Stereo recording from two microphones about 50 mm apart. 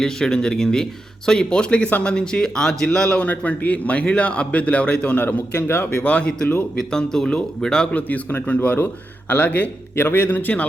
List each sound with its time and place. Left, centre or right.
0.0 s speech: centre
3.1 s a man's voice: left
5.2 s speech: left
5.7 s speech: left
6.0 s a man's voice: left
7.9 s speech: left
9.9 s a man's voice: left
10.3 s speech: left